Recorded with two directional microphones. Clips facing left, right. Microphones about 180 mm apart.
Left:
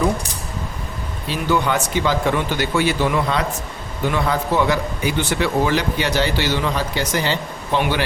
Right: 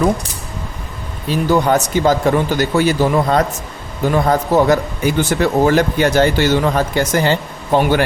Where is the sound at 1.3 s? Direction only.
40° right (ahead or behind).